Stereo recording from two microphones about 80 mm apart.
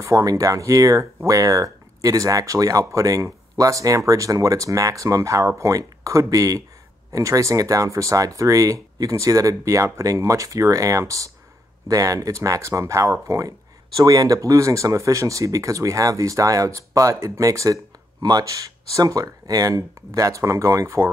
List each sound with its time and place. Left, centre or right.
0.0 s speech: right